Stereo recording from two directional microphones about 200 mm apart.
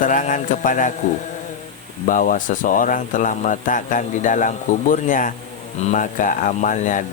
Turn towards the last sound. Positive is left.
turn(degrees=40)  # may be behind; listen again after turning